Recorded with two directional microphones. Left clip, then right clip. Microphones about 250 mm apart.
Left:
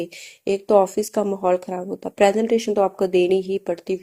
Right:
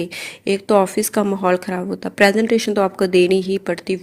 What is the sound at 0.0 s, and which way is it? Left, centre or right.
A woman's voice, right.